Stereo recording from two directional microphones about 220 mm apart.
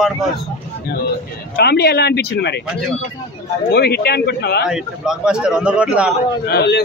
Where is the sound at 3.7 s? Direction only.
45° left (ahead or behind).